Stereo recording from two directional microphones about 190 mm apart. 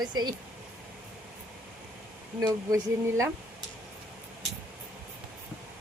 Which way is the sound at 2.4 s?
15° right (ahead or behind).